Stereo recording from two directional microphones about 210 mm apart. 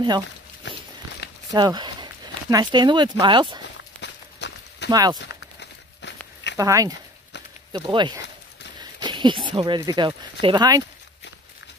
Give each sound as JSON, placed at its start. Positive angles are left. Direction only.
{"t": 1.5, "sound": "speech", "side_deg": -20}
{"t": 4.0, "sound": "walk", "side_deg": 55}
{"t": 5.3, "sound": "a sound", "side_deg": 55}
{"t": 6.5, "sound": "speech", "side_deg": -15}